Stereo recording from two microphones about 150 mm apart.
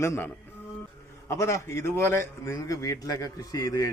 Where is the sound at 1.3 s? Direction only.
20° left (ahead or behind).